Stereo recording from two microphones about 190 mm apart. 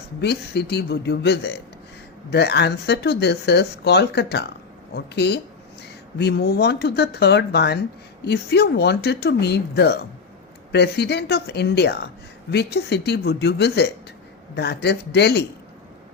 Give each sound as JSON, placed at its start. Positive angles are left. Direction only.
{"t": 0.2, "sound": "speech", "side_deg": 60}